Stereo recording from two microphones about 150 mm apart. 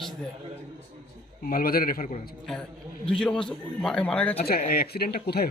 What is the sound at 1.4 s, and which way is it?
Speech, 75° left (ahead or behind).